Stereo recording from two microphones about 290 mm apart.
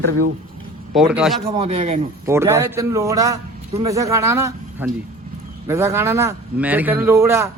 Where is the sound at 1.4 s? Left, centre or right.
Centre.